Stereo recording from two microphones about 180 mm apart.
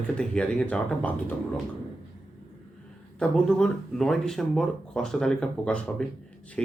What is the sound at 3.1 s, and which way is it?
Speech, 5° left (ahead or behind).